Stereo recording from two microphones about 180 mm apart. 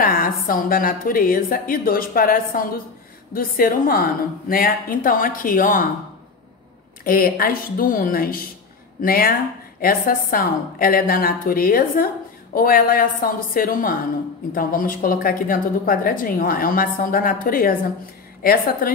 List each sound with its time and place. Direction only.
0.0 s a woman's voice: 50° left (ahead or behind)
7.1 s a woman's voice: 55° left (ahead or behind)